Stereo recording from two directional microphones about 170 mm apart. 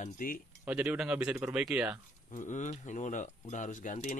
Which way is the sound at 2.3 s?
45° left (ahead or behind).